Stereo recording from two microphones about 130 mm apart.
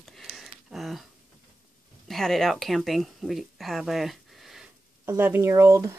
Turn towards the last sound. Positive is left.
turn(degrees=-20)  # may be behind; listen again after turning